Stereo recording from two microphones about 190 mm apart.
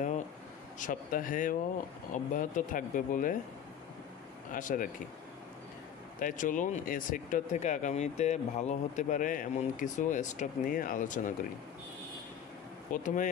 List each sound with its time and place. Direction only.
0.7 s speech: 45° left (ahead or behind)
4.5 s speech: 45° left (ahead or behind)
6.1 s speech: 45° left (ahead or behind)
12.9 s speech: 45° left (ahead or behind)